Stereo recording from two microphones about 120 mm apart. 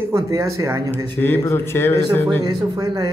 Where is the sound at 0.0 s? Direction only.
25° right (ahead or behind).